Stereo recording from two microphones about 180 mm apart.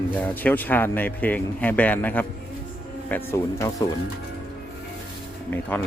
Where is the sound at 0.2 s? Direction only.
10° left (ahead or behind).